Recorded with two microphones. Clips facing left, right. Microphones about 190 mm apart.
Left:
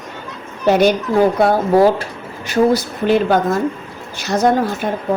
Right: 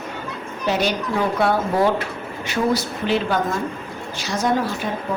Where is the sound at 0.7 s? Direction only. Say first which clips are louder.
Left 8 dB; 50° left (ahead or behind).